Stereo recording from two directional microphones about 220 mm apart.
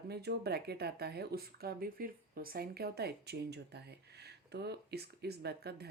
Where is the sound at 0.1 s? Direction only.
45° right (ahead or behind).